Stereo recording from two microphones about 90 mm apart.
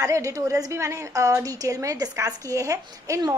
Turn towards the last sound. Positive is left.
turn(degrees=-40)  # may be behind; listen again after turning